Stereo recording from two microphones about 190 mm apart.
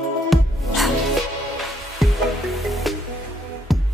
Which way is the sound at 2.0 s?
Centre (ahead or behind).